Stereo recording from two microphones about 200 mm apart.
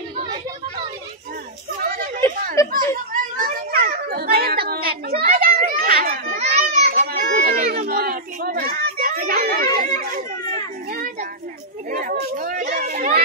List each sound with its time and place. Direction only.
1.8 s a sound: 45° right (ahead or behind)
2.6 s children playing: 15° left (ahead or behind)
3.3 s children playing: 40° right (ahead or behind)
6.3 s children playing: 30° right (ahead or behind)
6.9 s children playing: 45° right (ahead or behind)
11.9 s a sound: 45° right (ahead or behind)